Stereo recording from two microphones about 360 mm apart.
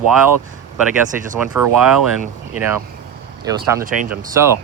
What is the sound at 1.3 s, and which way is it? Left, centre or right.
Speech, centre.